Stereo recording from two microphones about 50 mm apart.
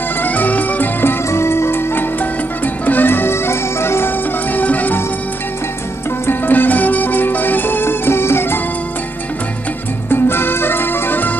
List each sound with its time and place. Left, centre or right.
0.2 s music: left
1.0 s music: left
2.1 s music: left
4.5 s music: left
6.2 s music: left
10.0 s music: left